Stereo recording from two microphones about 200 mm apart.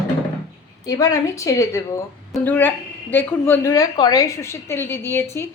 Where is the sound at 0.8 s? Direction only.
20° left (ahead or behind).